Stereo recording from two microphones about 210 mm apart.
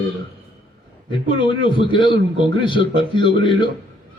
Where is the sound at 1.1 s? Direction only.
25° left (ahead or behind).